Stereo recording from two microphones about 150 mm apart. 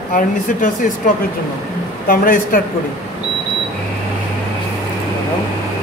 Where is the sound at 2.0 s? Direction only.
70° left (ahead or behind).